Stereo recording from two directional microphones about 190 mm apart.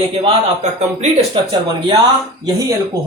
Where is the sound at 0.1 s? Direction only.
30° right (ahead or behind).